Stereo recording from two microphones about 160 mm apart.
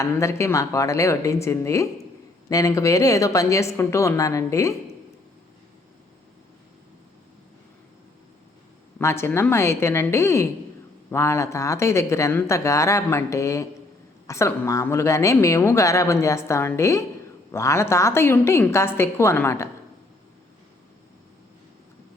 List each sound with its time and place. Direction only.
0.0 s a woman's voice: 20° left (ahead or behind)
9.0 s a woman's voice: 15° left (ahead or behind)